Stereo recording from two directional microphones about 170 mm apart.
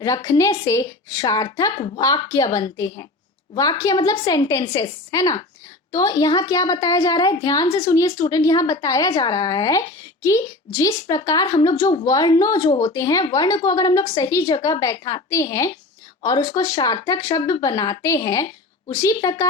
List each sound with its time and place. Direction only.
0.3 s a woman's voice: 20° left (ahead or behind)